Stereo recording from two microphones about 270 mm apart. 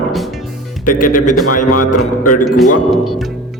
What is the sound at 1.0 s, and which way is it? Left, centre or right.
Speech, left.